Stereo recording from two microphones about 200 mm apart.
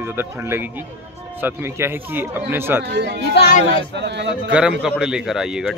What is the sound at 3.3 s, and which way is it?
Speech, 55° left (ahead or behind).